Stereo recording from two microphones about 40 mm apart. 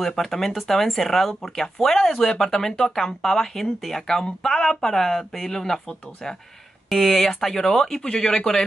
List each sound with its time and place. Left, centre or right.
0.0 s speech: centre
7.1 s speech: centre